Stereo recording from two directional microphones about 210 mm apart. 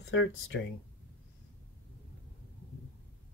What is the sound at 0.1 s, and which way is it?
Speech, 60° left (ahead or behind).